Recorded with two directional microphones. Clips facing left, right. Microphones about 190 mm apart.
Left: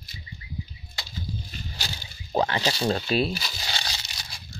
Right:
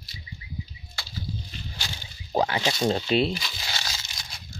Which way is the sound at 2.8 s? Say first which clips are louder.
Right 2 dB; 20° right (ahead or behind).